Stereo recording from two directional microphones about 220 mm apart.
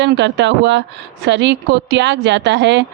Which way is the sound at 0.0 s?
55° right (ahead or behind).